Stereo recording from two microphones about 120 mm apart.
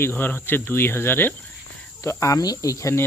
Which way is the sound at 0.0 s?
20° left (ahead or behind).